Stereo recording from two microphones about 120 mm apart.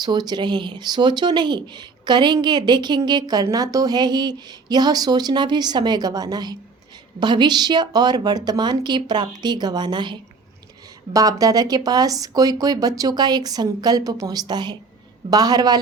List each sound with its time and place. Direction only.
0.0 s speech: 35° right (ahead or behind)